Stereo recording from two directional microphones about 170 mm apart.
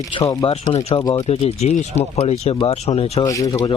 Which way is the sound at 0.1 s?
25° left (ahead or behind).